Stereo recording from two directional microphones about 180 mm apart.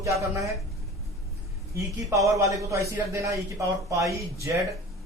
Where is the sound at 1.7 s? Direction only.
20° right (ahead or behind).